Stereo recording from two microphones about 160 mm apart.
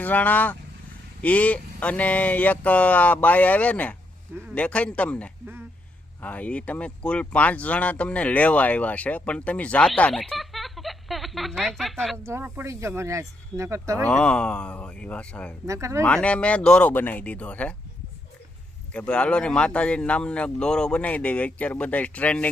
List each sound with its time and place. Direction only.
0.0 s speech: 10° left (ahead or behind)
12.1 s speech: 15° right (ahead or behind)
14.1 s speech: 5° left (ahead or behind)
15.6 s speech: 20° right (ahead or behind)
16.0 s speech: 5° left (ahead or behind)
18.9 s speech: 5° left (ahead or behind)